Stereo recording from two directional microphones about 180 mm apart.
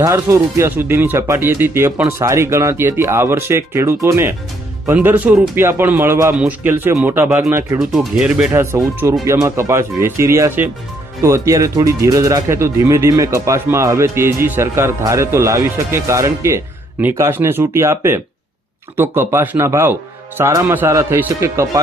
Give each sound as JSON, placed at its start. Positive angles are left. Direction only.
{"t": 0.0, "sound": "speech", "side_deg": -15}